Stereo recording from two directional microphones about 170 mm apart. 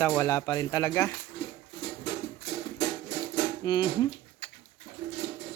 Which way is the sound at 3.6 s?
25° left (ahead or behind).